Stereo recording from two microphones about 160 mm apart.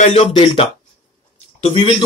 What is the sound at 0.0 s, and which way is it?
Speech, 40° left (ahead or behind).